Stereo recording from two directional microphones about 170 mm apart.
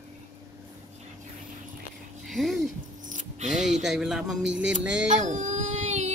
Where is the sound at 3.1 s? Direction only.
45° right (ahead or behind).